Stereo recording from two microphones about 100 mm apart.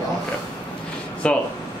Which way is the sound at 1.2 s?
10° left (ahead or behind).